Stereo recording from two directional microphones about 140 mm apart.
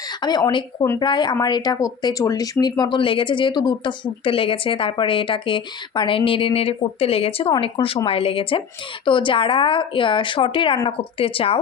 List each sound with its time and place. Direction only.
0.1 s speech: 30° left (ahead or behind)